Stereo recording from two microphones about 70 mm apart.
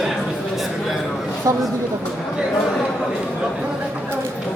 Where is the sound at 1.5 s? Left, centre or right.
Right.